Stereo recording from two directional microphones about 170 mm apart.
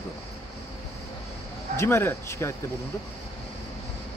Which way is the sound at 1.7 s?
15° left (ahead or behind).